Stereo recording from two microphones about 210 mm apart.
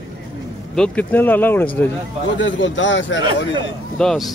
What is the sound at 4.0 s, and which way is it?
Speech, 5° left (ahead or behind).